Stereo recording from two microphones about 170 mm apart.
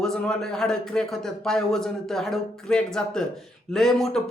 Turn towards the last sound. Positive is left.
turn(degrees=0)  # may be behind; listen again after turning